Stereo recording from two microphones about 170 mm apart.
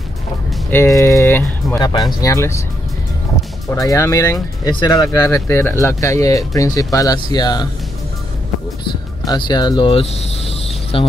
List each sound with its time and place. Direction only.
0.7 s speech: 15° left (ahead or behind)
3.7 s speech: 20° left (ahead or behind)
9.2 s speech: 25° left (ahead or behind)